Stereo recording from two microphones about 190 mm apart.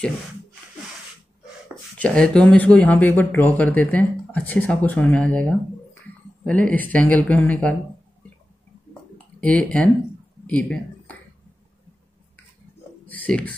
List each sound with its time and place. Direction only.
2.0 s speech: 5° left (ahead or behind)
9.4 s speech: 5° left (ahead or behind)
13.1 s speech: 5° left (ahead or behind)